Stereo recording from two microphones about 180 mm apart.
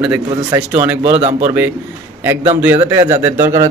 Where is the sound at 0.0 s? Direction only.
10° right (ahead or behind).